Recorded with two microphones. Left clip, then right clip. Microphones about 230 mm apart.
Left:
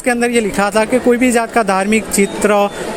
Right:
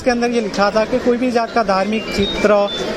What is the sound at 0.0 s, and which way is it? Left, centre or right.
Speech, left.